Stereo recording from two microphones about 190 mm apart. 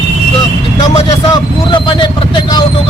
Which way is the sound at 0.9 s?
25° left (ahead or behind).